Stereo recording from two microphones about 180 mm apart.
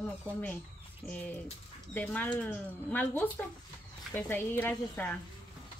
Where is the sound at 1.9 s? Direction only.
10° left (ahead or behind).